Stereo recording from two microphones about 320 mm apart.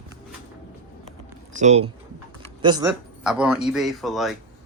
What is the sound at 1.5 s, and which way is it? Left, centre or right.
Speech, right.